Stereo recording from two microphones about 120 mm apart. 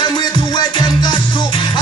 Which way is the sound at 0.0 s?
40° left (ahead or behind).